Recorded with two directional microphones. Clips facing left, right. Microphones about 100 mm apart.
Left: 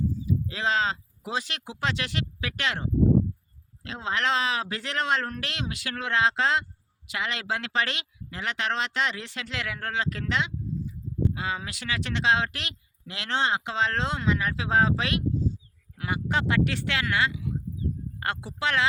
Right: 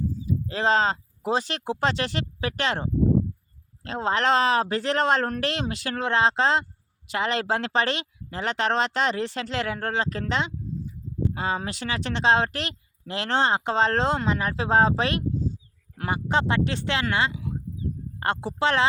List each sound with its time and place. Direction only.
0.3 s speech: 40° right (ahead or behind)